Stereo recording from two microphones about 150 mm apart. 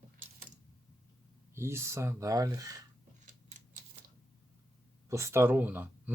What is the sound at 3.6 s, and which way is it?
Typewriter, 50° right (ahead or behind).